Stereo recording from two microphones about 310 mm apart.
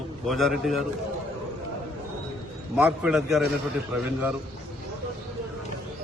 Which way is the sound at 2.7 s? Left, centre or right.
Centre.